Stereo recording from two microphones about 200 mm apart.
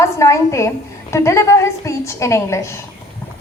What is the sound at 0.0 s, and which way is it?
A woman's voice, 15° left (ahead or behind).